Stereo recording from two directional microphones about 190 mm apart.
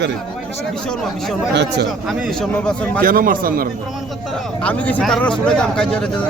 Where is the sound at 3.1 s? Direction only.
50° right (ahead or behind).